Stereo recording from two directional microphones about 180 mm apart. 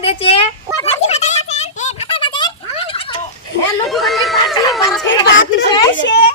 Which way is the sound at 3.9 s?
Centre (ahead or behind).